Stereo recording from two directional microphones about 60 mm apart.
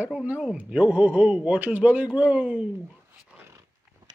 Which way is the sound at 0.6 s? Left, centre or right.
Right.